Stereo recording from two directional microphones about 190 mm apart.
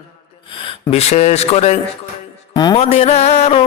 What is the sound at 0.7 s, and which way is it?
Speech, 35° left (ahead or behind).